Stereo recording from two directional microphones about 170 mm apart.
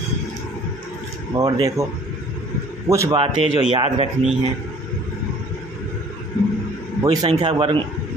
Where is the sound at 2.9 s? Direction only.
15° right (ahead or behind).